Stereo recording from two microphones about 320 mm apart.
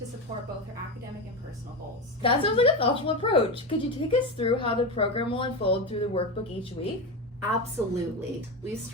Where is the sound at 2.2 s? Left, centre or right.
Centre.